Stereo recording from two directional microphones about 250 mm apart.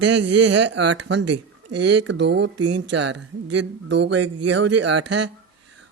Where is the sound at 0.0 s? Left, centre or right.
Right.